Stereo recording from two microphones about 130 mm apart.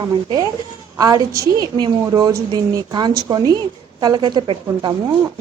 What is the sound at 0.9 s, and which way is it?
A woman's voice, 30° right (ahead or behind).